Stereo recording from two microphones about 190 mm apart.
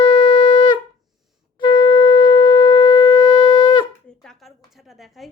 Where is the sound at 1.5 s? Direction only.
25° left (ahead or behind).